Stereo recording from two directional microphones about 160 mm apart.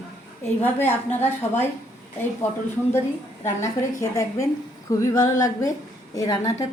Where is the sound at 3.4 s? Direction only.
20° left (ahead or behind).